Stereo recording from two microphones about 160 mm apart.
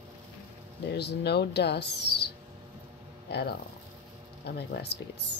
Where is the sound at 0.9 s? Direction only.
90° left.